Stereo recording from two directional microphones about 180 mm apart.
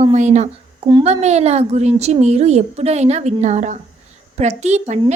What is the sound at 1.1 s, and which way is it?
A woman's voice, 40° right (ahead or behind).